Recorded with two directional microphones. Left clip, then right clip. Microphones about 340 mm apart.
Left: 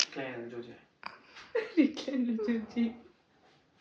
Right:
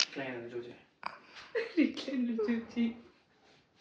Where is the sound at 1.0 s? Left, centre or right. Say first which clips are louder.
Right 3 dB; centre.